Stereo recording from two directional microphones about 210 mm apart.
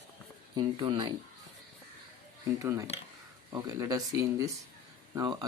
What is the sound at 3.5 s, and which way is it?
Speech, 15° right (ahead or behind).